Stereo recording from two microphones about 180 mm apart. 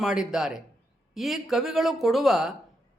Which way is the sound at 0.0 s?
Centre (ahead or behind).